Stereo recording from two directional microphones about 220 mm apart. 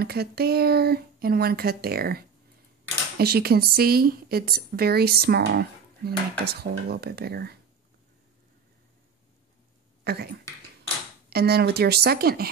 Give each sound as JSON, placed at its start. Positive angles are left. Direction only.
{"t": 0.0, "sound": "a woman's voice", "side_deg": -45}
{"t": 10.0, "sound": "a woman's voice", "side_deg": -45}